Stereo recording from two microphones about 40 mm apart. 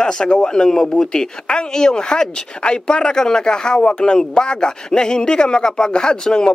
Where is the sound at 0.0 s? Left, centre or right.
Left.